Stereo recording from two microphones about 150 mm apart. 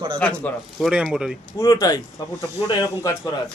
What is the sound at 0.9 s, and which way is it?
Speech, 5° right (ahead or behind).